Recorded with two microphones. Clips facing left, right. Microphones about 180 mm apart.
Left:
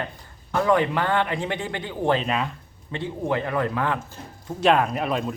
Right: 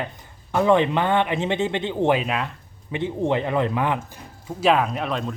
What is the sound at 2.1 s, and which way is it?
Speech, 5° right (ahead or behind).